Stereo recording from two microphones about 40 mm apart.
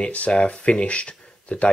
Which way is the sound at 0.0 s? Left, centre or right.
Left.